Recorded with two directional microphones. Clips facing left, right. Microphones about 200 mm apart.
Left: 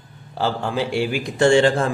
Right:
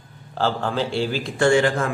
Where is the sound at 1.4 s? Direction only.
25° left (ahead or behind).